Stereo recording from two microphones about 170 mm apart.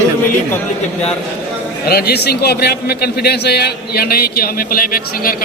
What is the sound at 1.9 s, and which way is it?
A man's voice, 65° left (ahead or behind).